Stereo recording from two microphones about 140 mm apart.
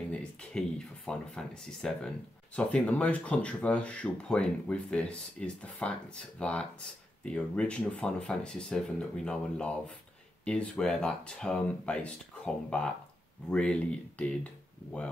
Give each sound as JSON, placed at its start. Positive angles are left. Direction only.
{"t": 0.1, "sound": "speech", "side_deg": 5}